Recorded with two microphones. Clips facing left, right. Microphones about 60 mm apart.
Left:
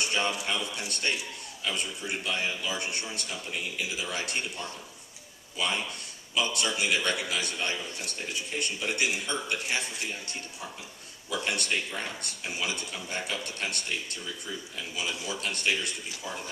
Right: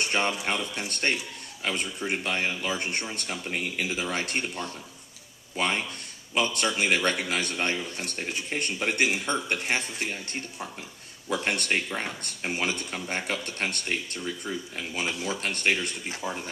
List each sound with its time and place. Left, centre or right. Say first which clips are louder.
0.0 s speech: right 2 dB; right